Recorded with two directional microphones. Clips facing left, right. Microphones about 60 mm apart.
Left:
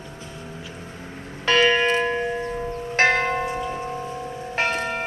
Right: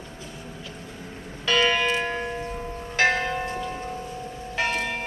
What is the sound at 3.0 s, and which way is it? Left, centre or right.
Church bell, left.